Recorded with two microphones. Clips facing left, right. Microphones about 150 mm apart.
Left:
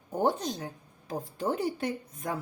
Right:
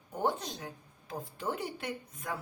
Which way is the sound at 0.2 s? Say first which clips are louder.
Left 5 dB; 40° left (ahead or behind).